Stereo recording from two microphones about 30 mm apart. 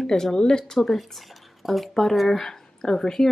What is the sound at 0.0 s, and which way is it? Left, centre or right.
Speech, centre.